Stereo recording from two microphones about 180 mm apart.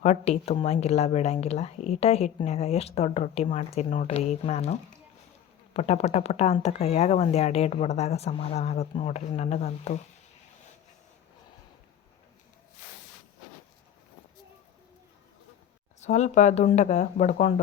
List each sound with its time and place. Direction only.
0.0 s speech: 35° left (ahead or behind)
16.0 s speech: 40° left (ahead or behind)